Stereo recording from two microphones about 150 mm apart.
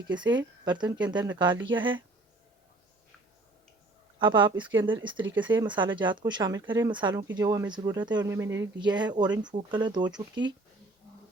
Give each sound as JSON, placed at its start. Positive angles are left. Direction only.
{"t": 0.1, "sound": "speech", "side_deg": -30}
{"t": 4.2, "sound": "speech", "side_deg": -30}
{"t": 8.8, "sound": "speech", "side_deg": -30}